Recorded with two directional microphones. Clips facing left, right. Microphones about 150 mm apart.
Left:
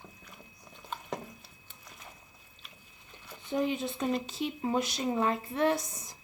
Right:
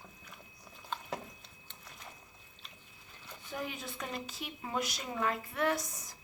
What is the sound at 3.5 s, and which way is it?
A woman's voice, 25° left (ahead or behind).